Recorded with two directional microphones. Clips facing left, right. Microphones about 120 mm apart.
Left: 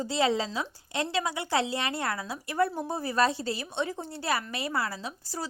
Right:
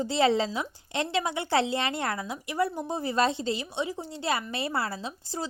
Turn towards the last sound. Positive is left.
turn(degrees=-25)  # may be behind; listen again after turning